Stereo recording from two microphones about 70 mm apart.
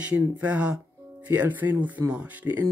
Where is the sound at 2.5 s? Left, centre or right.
Right.